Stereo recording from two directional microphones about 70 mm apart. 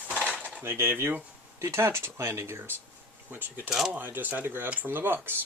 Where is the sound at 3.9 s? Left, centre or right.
Right.